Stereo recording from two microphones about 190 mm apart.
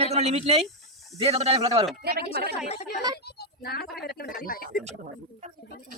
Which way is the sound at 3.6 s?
55° left (ahead or behind).